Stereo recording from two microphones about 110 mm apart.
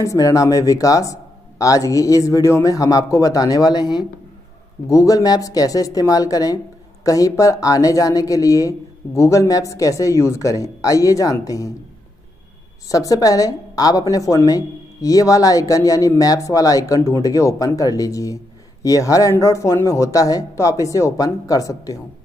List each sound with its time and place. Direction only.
0.0 s a woman's voice: 30° left (ahead or behind)
12.9 s a woman's voice: 30° left (ahead or behind)